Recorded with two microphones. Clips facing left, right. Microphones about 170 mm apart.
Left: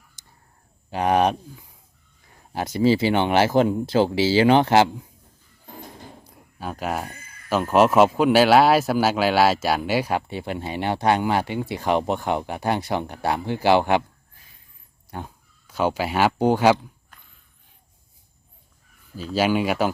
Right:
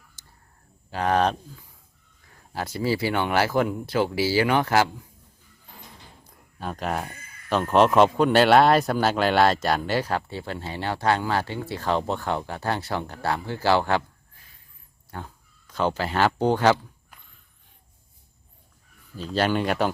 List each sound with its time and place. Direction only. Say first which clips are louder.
0.2 s a sound: even; 15° left (ahead or behind)
0.9 s speech: left 3 dB; 15° left (ahead or behind)
5.6 s a sound: left 8 dB; 50° left (ahead or behind)
6.6 s speech: left 1 dB; 5° left (ahead or behind)
15.1 s speech: left 3 dB; 15° left (ahead or behind)
19.1 s speech: left 2 dB; 5° left (ahead or behind)